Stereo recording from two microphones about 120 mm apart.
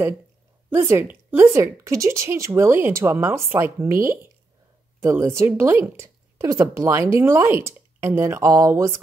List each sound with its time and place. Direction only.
0.7 s a woman's voice: 20° right (ahead or behind)